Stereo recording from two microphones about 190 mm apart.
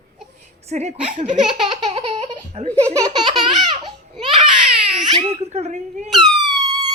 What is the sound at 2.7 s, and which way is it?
Speech, 15° right (ahead or behind).